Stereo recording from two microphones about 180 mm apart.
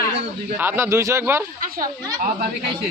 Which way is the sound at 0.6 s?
10° right (ahead or behind).